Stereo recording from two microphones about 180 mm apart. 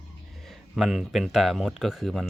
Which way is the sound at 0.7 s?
5° right (ahead or behind).